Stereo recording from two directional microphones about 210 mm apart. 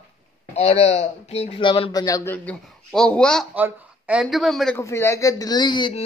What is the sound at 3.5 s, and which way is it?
Speech, 5° right (ahead or behind).